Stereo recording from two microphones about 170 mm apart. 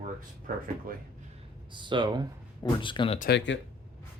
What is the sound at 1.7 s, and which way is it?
Speech, 30° right (ahead or behind).